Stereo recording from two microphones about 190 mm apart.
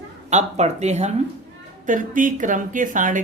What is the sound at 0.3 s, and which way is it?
A woman's voice, 35° right (ahead or behind).